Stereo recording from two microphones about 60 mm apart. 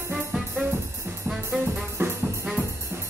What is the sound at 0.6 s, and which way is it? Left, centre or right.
Music, right.